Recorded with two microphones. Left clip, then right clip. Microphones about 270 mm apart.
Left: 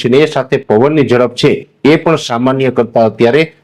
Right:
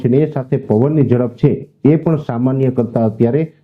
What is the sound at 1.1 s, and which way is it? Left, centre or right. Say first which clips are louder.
A man's voice: left 6 dB; centre.